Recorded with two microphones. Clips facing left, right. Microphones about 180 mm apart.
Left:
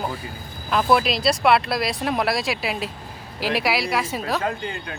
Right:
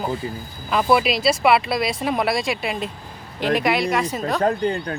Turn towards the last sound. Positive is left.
turn(degrees=-40)  # may be behind; listen again after turning